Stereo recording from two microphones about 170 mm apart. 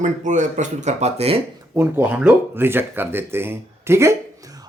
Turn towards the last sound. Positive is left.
turn(degrees=-20)  # may be behind; listen again after turning